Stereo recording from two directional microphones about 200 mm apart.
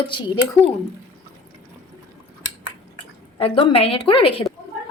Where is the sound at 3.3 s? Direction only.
30° left (ahead or behind).